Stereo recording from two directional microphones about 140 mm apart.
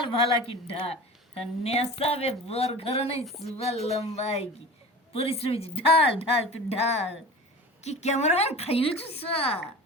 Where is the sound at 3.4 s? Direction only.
45° left (ahead or behind).